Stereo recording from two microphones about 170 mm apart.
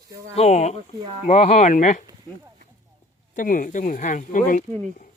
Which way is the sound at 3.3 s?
50° left (ahead or behind).